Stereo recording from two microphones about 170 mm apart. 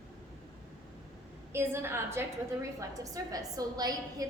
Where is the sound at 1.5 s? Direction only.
15° right (ahead or behind).